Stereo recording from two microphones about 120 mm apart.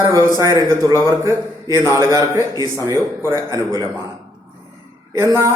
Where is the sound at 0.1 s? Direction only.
25° right (ahead or behind).